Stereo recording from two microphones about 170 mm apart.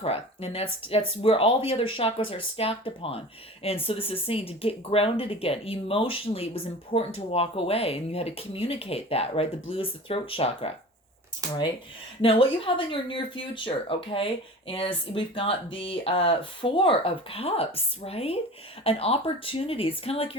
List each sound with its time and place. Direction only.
0.0 s speech: 35° left (ahead or behind)
12.2 s speech: 30° left (ahead or behind)